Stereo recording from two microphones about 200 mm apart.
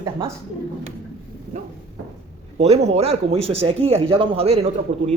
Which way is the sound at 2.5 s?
30° right (ahead or behind).